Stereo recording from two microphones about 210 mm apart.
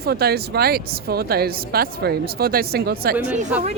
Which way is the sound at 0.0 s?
50° right (ahead or behind).